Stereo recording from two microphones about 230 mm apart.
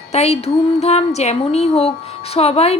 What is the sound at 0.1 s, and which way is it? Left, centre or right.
Speech, left.